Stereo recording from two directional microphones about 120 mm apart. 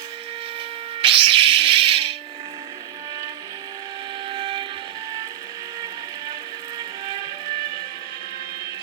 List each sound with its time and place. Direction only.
1.0 s music: 50° right (ahead or behind)
4.3 s steam whistle: 40° right (ahead or behind)
6.7 s music: 40° right (ahead or behind)